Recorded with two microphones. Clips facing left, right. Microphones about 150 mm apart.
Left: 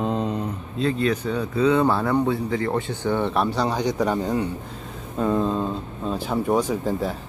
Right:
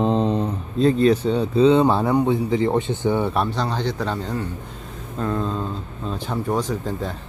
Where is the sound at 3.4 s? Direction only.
10° left (ahead or behind).